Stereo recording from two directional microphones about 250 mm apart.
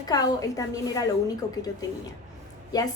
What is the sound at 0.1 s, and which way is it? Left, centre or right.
Speech, centre.